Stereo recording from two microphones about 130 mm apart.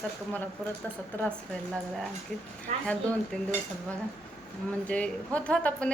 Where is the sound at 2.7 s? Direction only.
60° right (ahead or behind).